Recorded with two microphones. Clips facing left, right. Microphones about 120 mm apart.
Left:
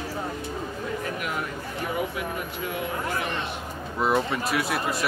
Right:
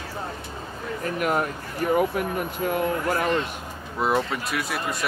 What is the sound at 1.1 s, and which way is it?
Speech, 45° right (ahead or behind).